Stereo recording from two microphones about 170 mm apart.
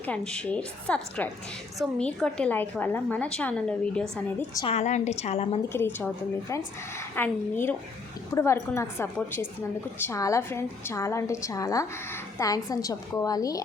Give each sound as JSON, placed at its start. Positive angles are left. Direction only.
{"t": 0.0, "sound": "a woman's voice", "side_deg": 5}
{"t": 4.7, "sound": "a woman's voice", "side_deg": 45}
{"t": 5.6, "sound": "a woman's voice", "side_deg": 15}